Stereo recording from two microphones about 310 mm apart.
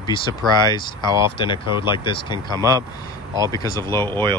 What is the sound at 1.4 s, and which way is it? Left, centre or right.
Speech, centre.